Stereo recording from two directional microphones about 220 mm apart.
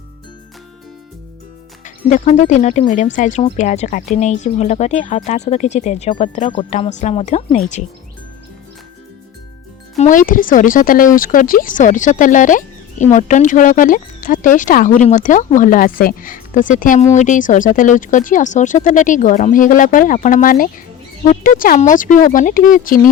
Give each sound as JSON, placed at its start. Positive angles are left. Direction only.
{"t": 1.8, "sound": "speech", "side_deg": 35}
{"t": 10.0, "sound": "speech", "side_deg": 35}